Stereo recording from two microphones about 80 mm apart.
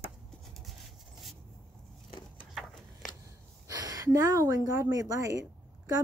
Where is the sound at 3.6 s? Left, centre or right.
Right.